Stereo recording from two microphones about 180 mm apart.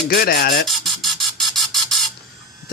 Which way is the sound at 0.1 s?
60° left (ahead or behind).